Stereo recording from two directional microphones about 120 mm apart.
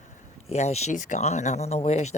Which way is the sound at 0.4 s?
65° left (ahead or behind).